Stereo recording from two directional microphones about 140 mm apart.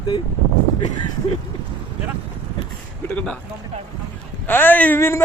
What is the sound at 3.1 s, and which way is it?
Speech, 10° left (ahead or behind).